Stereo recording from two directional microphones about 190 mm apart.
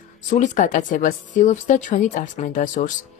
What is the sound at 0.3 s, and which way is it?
Speech, 40° left (ahead or behind).